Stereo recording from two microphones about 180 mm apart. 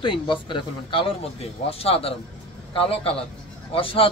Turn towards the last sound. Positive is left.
turn(degrees=30)  # may be behind; listen again after turning